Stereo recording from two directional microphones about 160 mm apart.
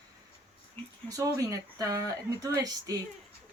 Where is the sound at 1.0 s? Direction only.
20° right (ahead or behind).